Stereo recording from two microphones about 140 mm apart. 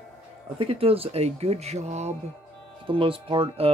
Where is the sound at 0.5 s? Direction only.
45° right (ahead or behind).